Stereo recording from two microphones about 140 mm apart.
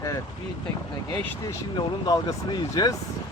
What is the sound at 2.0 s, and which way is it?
Speech, 30° left (ahead or behind).